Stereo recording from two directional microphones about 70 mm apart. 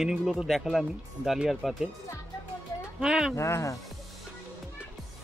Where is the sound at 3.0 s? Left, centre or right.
Centre.